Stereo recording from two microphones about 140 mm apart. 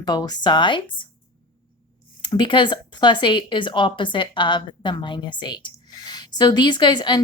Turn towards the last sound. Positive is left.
turn(degrees=30)  # may be behind; listen again after turning